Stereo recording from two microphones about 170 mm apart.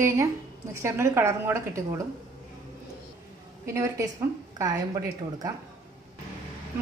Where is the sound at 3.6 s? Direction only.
15° right (ahead or behind).